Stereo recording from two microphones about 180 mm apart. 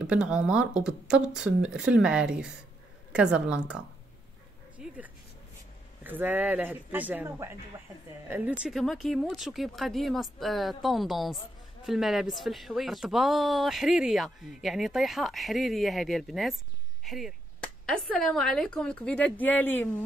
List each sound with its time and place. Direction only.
0.0 s speech: 5° right (ahead or behind)
4.7 s dog: 5° right (ahead or behind)
6.0 s speech: 10° right (ahead or behind); by 19.9 s 10° left (ahead or behind)